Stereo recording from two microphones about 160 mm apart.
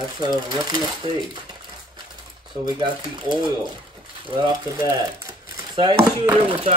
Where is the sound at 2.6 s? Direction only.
25° right (ahead or behind).